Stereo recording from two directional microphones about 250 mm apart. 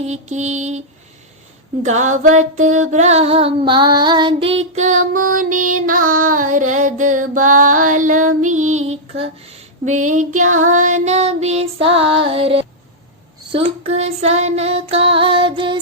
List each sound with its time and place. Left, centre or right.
0.0 s female singing: right
1.8 s female singing: right
5.1 s music: right
8.4 s female singing: right